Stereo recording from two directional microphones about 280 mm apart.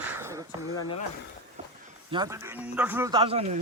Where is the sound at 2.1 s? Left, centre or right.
Centre.